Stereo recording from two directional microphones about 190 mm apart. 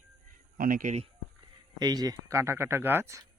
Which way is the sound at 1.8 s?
20° right (ahead or behind).